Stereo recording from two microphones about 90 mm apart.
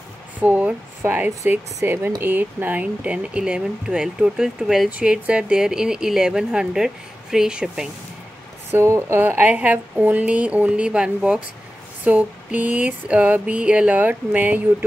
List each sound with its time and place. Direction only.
0.4 s speech: 15° right (ahead or behind)
8.6 s speech: 25° right (ahead or behind)